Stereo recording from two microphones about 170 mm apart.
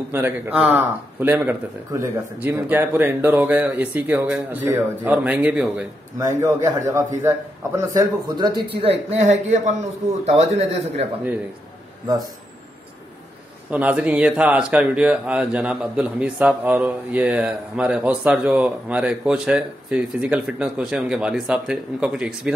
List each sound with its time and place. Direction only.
0.1 s speech: 10° right (ahead or behind)
6.1 s a man's voice: 20° right (ahead or behind)
9.2 s a man's voice: 40° right (ahead or behind)
13.7 s speech: 5° right (ahead or behind)